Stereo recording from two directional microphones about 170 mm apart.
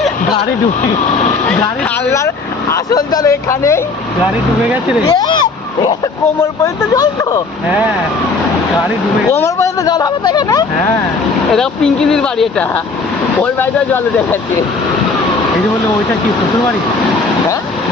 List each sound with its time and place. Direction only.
2.0 s speech: 15° left (ahead or behind)
5.0 s speech: 25° left (ahead or behind)
9.4 s speech: 20° left (ahead or behind)
11.5 s speech: 5° left (ahead or behind)